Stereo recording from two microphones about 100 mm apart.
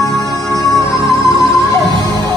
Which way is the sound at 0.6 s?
35° left (ahead or behind).